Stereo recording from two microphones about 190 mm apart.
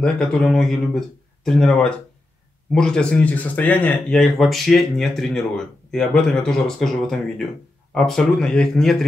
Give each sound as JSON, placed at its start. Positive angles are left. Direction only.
{"t": 0.0, "sound": "speech", "side_deg": 5}